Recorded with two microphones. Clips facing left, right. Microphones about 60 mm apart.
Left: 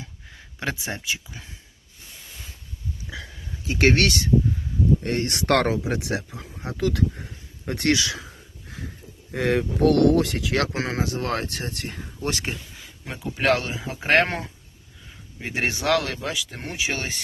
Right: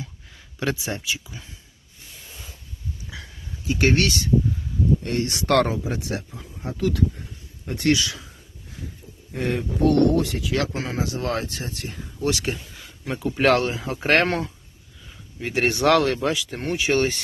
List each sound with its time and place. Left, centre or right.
0.6 s speech: left
3.7 s speech: left
5.0 s speech: left
5.3 s speech: left
9.3 s speech: left
11.1 s speech: left
12.7 s speech: centre
14.3 s speech: centre
15.8 s speech: centre